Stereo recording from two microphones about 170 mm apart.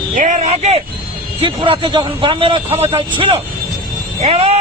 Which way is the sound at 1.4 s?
30° right (ahead or behind).